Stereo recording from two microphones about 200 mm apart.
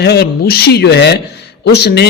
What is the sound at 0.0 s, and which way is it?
A man's voice, 55° left (ahead or behind).